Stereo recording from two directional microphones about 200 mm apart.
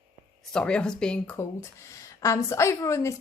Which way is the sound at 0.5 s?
5° left (ahead or behind).